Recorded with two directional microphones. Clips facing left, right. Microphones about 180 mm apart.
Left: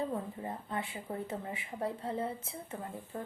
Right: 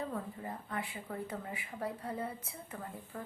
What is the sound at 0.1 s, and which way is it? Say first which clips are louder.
A woman's voice: left 3 dB; 25° left (ahead or behind).